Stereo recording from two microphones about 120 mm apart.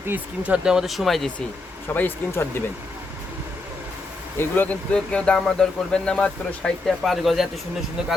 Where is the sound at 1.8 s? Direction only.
15° left (ahead or behind).